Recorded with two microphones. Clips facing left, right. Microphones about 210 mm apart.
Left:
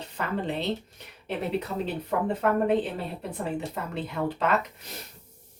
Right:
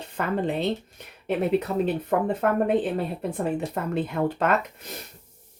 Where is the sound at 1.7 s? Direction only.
55° right (ahead or behind).